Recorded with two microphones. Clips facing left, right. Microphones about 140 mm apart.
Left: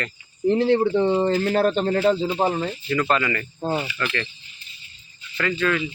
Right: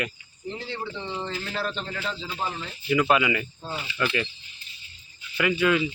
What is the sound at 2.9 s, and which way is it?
Speech, 10° right (ahead or behind).